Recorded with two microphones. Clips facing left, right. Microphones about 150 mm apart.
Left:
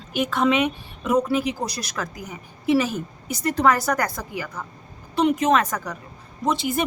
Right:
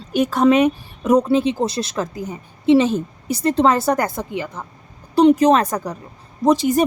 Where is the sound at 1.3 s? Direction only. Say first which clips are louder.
Right 6 dB; 25° right (ahead or behind).